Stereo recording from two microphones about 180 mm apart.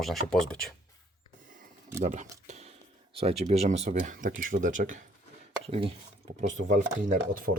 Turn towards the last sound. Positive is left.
turn(degrees=-80)